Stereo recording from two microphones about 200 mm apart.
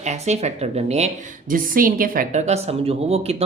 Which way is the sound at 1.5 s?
45° right (ahead or behind).